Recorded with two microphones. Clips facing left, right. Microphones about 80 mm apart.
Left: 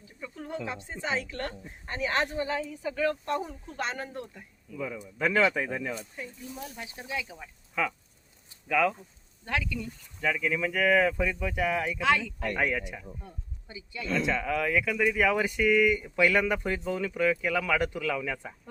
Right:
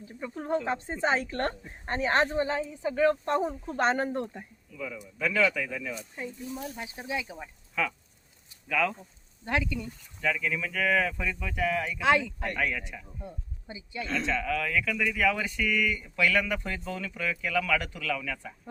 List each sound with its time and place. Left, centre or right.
0.0 s speech: right
4.8 s speech: left
6.1 s speech: right
7.8 s speech: centre
9.4 s speech: right
10.2 s speech: centre
12.0 s speech: centre
12.5 s speech: left
13.2 s speech: right
14.1 s speech: centre